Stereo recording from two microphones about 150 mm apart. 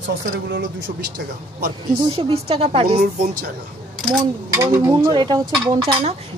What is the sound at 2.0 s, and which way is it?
Speech, 35° right (ahead or behind).